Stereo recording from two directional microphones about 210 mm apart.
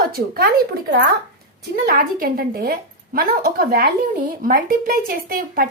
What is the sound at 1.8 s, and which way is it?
Speech, 45° right (ahead or behind).